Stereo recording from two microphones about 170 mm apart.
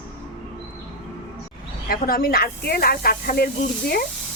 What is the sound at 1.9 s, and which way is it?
Speech, 60° left (ahead or behind).